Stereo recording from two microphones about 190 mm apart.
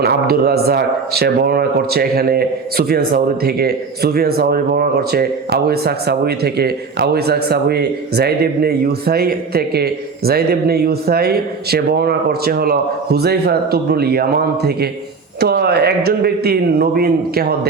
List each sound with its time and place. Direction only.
0.0 s a man's voice: 55° right (ahead or behind)